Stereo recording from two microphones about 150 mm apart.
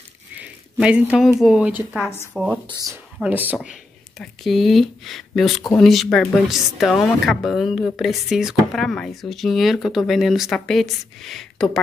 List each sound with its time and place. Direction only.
0.4 s a sound: 10° right (ahead or behind)
1.4 s speech: 5° right (ahead or behind)
2.6 s speech: 25° right (ahead or behind)
3.2 s speech: 10° right (ahead or behind)
4.2 s speech: centre (ahead or behind)